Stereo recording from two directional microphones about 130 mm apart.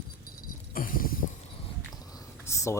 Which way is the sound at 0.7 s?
90° left.